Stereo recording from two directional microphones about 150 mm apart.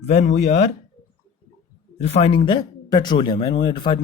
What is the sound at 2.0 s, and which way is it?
Speech, 45° left (ahead or behind).